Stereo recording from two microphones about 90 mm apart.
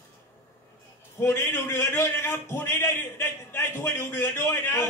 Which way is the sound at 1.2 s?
30° left (ahead or behind).